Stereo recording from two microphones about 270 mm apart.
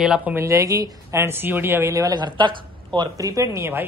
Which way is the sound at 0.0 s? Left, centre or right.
Centre.